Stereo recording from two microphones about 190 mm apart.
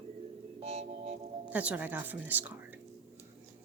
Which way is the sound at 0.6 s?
35° right (ahead or behind).